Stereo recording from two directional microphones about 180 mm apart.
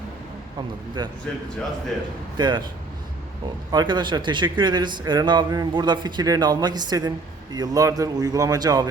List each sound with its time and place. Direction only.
1.0 s speech: 25° right (ahead or behind)
2.4 s speech: 25° right (ahead or behind)
3.7 s speech: 25° right (ahead or behind)